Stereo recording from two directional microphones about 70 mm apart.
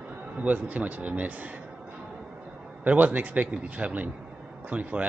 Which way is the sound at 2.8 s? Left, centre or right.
Right.